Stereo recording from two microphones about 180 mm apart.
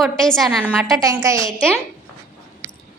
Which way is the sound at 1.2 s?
15° right (ahead or behind).